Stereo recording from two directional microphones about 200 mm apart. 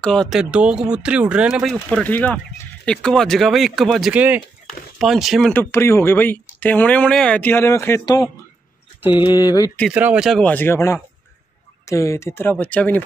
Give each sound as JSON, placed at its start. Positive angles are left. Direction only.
{"t": 0.0, "sound": "speech", "side_deg": 5}
{"t": 5.5, "sound": "speech", "side_deg": 10}
{"t": 9.9, "sound": "speech", "side_deg": -5}